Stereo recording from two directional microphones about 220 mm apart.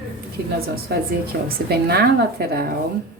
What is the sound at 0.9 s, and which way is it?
A woman's voice, 45° right (ahead or behind).